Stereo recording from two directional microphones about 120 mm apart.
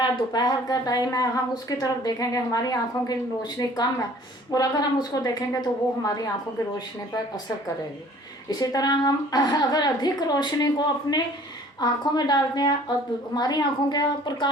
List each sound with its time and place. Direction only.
0.0 s a woman's voice: 35° left (ahead or behind)
8.4 s a woman's voice: 35° left (ahead or behind)